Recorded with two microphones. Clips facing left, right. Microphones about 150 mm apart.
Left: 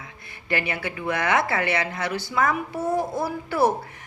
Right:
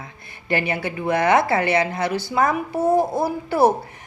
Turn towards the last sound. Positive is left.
turn(degrees=-35)  # may be behind; listen again after turning